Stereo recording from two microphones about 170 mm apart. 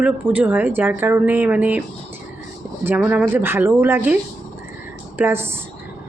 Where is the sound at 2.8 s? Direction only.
10° right (ahead or behind).